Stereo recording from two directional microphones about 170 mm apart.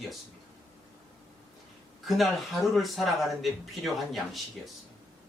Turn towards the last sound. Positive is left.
turn(degrees=0)  # may be behind; listen again after turning